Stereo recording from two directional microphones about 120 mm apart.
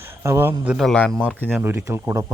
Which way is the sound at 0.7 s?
5° left (ahead or behind).